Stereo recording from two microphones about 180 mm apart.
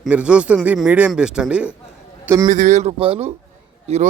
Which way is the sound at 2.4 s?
45° right (ahead or behind).